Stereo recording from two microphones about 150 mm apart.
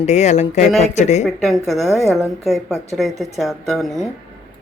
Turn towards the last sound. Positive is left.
turn(degrees=0)  # may be behind; listen again after turning